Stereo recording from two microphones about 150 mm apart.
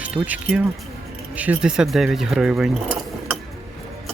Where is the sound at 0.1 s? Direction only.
25° right (ahead or behind).